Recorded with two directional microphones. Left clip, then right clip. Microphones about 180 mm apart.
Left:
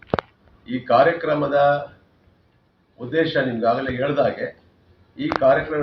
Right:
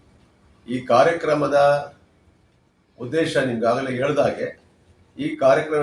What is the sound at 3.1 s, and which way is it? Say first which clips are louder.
Speech: even; 15° right (ahead or behind).